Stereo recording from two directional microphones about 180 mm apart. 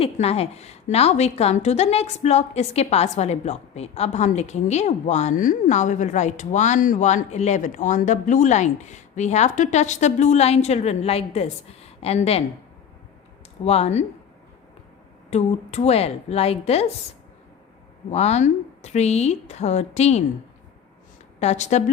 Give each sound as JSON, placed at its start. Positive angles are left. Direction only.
{"t": 0.0, "sound": "a woman's voice", "side_deg": 35}
{"t": 13.7, "sound": "a woman's voice", "side_deg": 35}
{"t": 15.3, "sound": "a woman's voice", "side_deg": 35}
{"t": 18.1, "sound": "a woman's voice", "side_deg": 35}
{"t": 21.3, "sound": "a woman's voice", "side_deg": 40}